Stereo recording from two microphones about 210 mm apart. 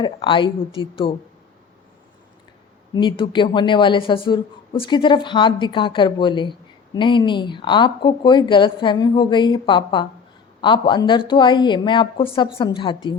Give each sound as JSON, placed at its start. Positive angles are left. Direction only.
{"t": 0.0, "sound": "speech", "side_deg": 20}
{"t": 2.9, "sound": "speech", "side_deg": 20}